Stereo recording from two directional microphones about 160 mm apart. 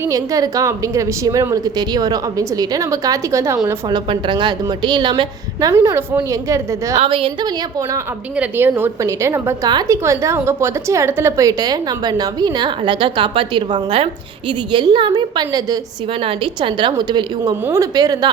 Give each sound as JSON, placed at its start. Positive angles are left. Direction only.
{"t": 0.0, "sound": "a woman's voice", "side_deg": -20}
{"t": 3.8, "sound": "a woman's voice", "side_deg": -30}
{"t": 7.0, "sound": "a woman's voice", "side_deg": -35}
{"t": 8.4, "sound": "a woman's voice", "side_deg": -10}